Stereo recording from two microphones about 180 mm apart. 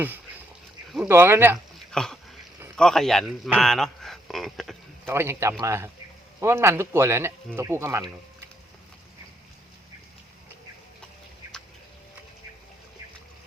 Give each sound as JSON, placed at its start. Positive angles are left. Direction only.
{"t": 1.0, "sound": "speech", "side_deg": -15}
{"t": 1.9, "sound": "dog", "side_deg": 5}
{"t": 2.7, "sound": "a man's voice", "side_deg": 5}
{"t": 5.0, "sound": "speech", "side_deg": -15}